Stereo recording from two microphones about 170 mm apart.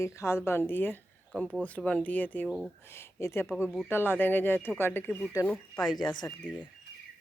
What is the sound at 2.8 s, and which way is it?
Speech, 15° left (ahead or behind).